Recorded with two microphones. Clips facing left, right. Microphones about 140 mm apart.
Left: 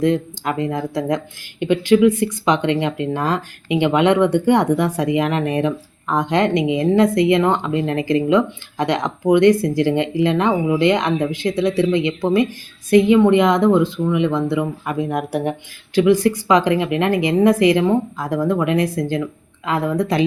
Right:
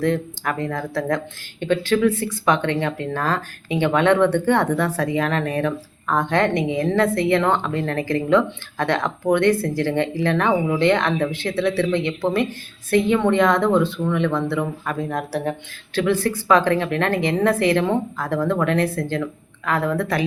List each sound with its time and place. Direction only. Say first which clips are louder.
0.0 s speech: left 3 dB; 15° left (ahead or behind)